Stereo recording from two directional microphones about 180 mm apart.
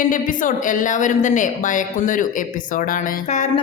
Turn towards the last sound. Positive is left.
turn(degrees=40)  # may be behind; listen again after turning